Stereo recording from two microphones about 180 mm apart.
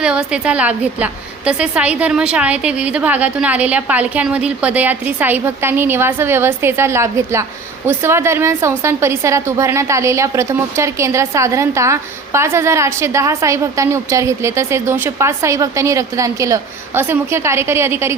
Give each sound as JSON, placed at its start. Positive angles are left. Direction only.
{"t": 0.0, "sound": "a woman's voice", "side_deg": -5}